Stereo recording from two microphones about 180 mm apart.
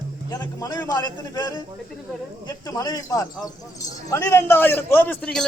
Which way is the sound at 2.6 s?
20° left (ahead or behind).